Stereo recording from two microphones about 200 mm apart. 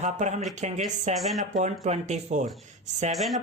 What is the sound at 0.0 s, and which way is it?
Speech, 35° right (ahead or behind).